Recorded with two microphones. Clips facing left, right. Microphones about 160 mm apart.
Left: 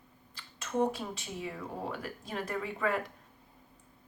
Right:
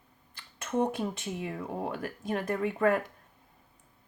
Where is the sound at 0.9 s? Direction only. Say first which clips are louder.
Right 6 dB; 50° right (ahead or behind).